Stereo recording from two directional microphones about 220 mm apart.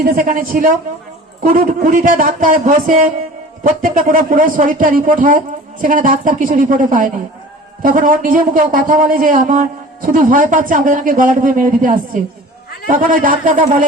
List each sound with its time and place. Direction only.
0.0 s speech: 40° right (ahead or behind)